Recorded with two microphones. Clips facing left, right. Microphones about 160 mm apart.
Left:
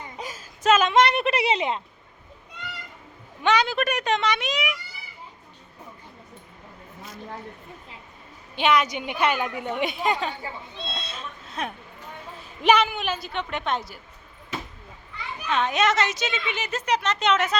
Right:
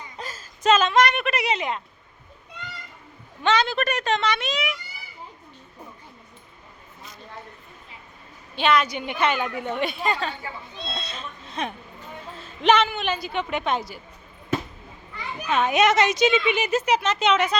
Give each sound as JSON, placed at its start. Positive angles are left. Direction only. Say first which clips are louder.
{"t": 0.2, "sound": "a sound", "louder": "right 2 dB", "side_deg": 15}
{"t": 0.9, "sound": "a woman's voice", "louder": "left 1 dB", "side_deg": 25}
{"t": 3.4, "sound": "a woman's voice", "louder": "even", "side_deg": 15}
{"t": 8.5, "sound": "a woman's voice", "louder": "even", "side_deg": 15}
{"t": 10.8, "sound": "a woman's voice", "louder": "right 2 dB", "side_deg": 5}
{"t": 15.4, "sound": "speech", "louder": "right 3 dB", "side_deg": -10}